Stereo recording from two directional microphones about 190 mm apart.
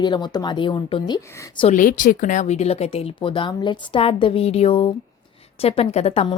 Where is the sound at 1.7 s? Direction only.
45° left (ahead or behind).